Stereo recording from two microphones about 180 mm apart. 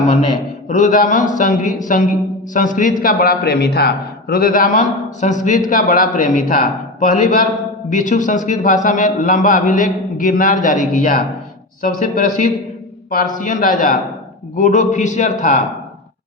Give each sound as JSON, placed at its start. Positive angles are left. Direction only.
{"t": 0.7, "sound": "a man's voice", "side_deg": 45}